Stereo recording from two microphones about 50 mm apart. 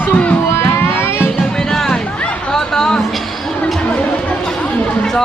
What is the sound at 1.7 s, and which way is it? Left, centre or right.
Music, centre.